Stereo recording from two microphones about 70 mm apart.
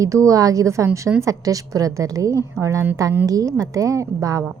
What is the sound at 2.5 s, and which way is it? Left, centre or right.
A woman's voice, right.